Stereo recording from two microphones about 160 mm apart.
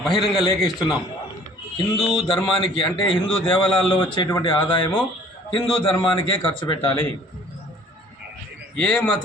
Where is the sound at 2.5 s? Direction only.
30° left (ahead or behind).